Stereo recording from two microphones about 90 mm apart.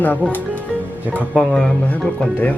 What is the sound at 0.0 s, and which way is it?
Speech, 20° left (ahead or behind).